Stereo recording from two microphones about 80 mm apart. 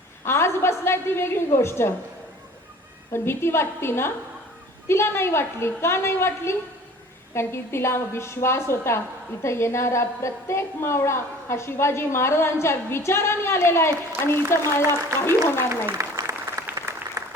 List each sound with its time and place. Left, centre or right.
0.3 s a woman's voice: left
3.1 s a woman's voice: left
15.9 s applause: right